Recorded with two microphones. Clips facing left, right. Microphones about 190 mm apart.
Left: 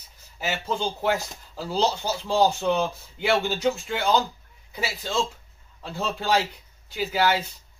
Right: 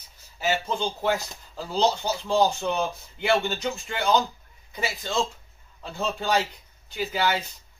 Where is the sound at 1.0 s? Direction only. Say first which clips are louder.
Left 1 dB; 5° left (ahead or behind).